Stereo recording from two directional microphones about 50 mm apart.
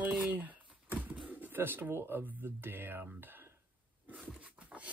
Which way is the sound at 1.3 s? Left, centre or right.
Right.